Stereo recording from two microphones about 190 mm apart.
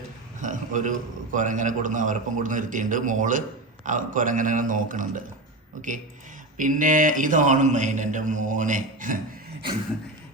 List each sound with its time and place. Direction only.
0.4 s a man's voice: 40° right (ahead or behind)